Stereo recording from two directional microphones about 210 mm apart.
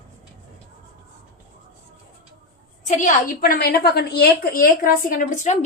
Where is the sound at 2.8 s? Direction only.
35° left (ahead or behind).